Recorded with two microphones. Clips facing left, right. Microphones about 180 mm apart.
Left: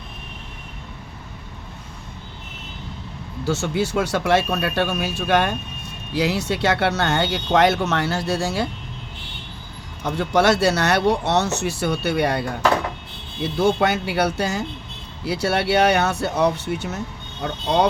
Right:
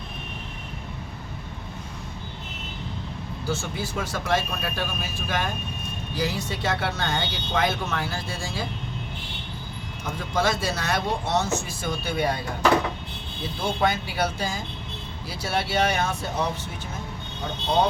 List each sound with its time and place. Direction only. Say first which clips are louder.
3.4 s speech: left 8 dB; 75° left (ahead or behind)
10.2 s speech: left 8 dB; 75° left (ahead or behind)